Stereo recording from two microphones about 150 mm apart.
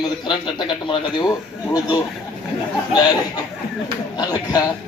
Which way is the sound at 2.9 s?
30° left (ahead or behind).